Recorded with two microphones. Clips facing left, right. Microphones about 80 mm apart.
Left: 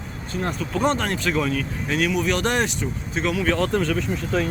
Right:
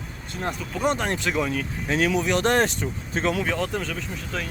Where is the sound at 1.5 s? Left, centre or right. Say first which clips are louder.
Left 1 dB; right.